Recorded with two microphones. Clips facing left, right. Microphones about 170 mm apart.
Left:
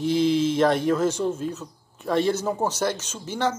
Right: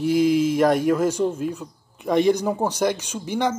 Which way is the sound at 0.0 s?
10° right (ahead or behind).